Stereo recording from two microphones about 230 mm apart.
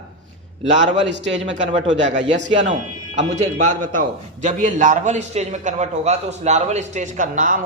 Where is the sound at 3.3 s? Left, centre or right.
Right.